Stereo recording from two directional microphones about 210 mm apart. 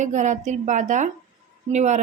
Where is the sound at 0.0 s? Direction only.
35° right (ahead or behind).